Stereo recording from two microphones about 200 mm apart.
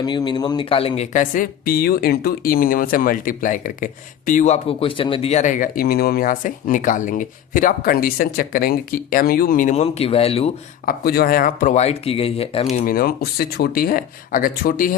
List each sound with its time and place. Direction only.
0.0 s speech: 20° left (ahead or behind)
10.8 s speech: 50° left (ahead or behind); by 12.6 s 30° left (ahead or behind)
12.7 s speech: 45° left (ahead or behind)